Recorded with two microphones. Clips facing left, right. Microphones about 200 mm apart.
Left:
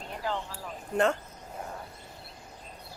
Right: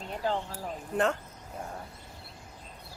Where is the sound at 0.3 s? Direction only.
40° right (ahead or behind).